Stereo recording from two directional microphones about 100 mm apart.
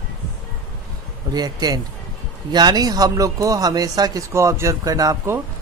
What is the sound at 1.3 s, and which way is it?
Speech, 40° right (ahead or behind).